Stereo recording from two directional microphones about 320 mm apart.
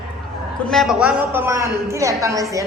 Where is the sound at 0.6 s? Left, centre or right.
Centre.